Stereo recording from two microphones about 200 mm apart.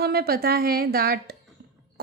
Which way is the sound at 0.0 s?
50° right (ahead or behind).